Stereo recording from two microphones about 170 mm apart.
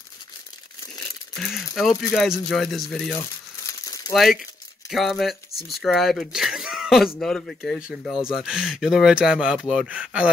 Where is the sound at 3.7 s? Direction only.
20° left (ahead or behind).